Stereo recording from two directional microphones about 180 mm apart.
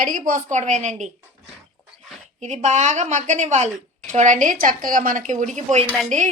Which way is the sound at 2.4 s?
40° right (ahead or behind).